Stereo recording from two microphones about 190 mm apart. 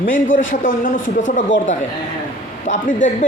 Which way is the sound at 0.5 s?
45° left (ahead or behind).